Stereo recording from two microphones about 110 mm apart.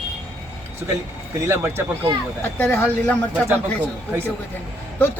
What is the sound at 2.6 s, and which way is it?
Speech, 15° left (ahead or behind).